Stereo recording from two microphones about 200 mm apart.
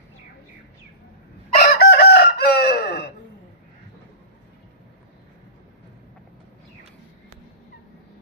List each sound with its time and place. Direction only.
1.5 s chicken: 55° left (ahead or behind)